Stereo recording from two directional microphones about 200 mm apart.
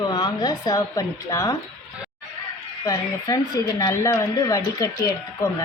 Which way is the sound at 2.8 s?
20° left (ahead or behind).